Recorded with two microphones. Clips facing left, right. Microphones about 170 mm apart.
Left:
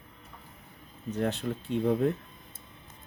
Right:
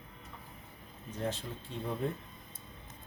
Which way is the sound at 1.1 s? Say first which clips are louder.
Left 7 dB; 70° left (ahead or behind).